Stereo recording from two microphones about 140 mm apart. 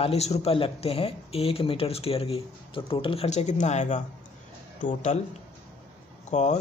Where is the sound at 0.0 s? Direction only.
50° left (ahead or behind).